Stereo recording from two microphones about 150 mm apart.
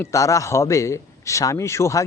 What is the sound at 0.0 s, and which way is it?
A man's voice, 20° left (ahead or behind).